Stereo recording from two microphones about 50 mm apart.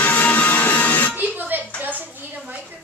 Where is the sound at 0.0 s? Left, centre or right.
Left.